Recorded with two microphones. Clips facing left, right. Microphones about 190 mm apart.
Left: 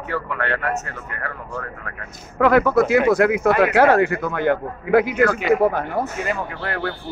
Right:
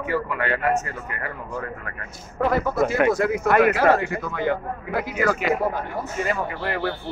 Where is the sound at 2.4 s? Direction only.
80° left; by 5.2 s 65° left (ahead or behind).